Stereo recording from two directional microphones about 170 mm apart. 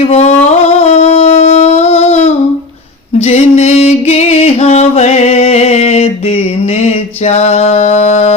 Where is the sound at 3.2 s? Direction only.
40° left (ahead or behind).